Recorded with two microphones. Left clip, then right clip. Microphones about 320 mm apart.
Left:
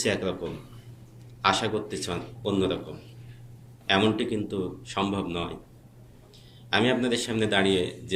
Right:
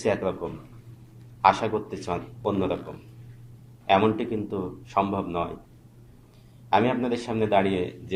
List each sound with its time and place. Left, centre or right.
0.0 s a man's voice: centre
1.4 s a man's voice: centre
3.8 s a man's voice: centre
6.7 s a man's voice: centre